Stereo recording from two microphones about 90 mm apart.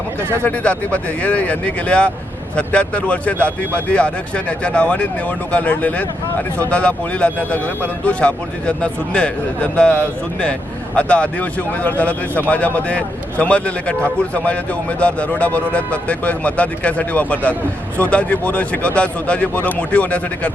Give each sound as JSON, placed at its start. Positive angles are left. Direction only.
{"t": 0.2, "sound": "speech", "side_deg": -30}
{"t": 0.4, "sound": "speech", "side_deg": 15}